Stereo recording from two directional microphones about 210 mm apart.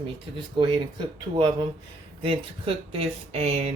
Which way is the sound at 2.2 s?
30° right (ahead or behind).